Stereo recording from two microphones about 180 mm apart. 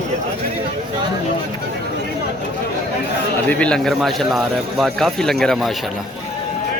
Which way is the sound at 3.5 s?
5° left (ahead or behind).